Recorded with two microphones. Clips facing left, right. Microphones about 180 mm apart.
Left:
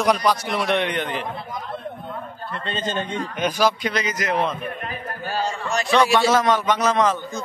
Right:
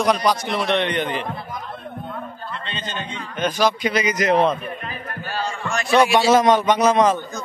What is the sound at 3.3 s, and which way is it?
Speech, 10° left (ahead or behind).